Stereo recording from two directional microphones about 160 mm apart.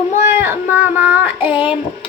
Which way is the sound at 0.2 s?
15° right (ahead or behind).